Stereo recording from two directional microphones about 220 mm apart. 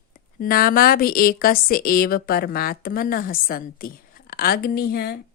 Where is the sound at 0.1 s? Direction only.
40° left (ahead or behind).